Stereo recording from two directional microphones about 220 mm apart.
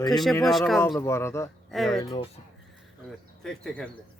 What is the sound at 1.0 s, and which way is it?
Speech, 10° left (ahead or behind).